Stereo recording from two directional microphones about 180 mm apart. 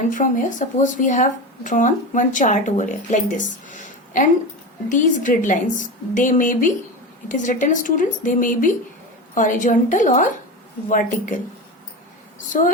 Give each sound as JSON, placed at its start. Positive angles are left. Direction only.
{"t": 0.1, "sound": "speech", "side_deg": 45}